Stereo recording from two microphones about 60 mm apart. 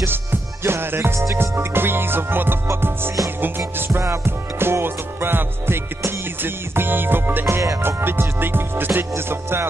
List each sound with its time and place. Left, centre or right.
0.0 s music: right